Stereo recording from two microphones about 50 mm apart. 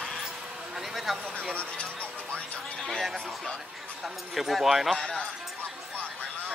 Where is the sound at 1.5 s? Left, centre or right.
Left.